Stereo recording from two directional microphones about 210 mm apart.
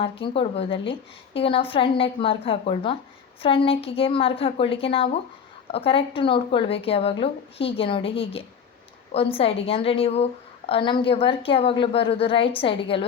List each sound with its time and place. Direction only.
0.0 s speech: 25° left (ahead or behind)